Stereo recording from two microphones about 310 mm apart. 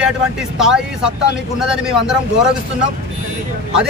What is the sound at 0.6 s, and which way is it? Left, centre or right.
Speech, centre.